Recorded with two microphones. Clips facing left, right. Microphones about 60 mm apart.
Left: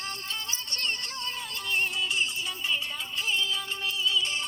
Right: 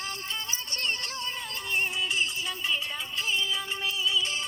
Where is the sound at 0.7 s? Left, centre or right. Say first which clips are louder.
Right 1 dB; right.